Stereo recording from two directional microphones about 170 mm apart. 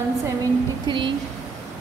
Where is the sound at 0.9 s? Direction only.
30° right (ahead or behind).